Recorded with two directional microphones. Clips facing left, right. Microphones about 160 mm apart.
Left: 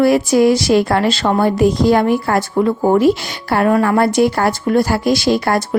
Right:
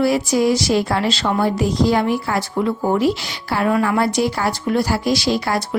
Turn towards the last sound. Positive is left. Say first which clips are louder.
# left 5 dB
turn(degrees=55)  # may be behind; listen again after turning